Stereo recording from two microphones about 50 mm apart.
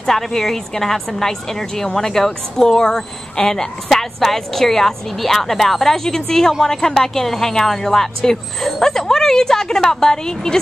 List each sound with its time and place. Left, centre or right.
0.0 s speech: centre